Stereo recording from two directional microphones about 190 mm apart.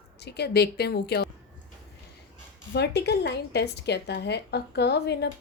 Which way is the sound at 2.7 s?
60° left (ahead or behind).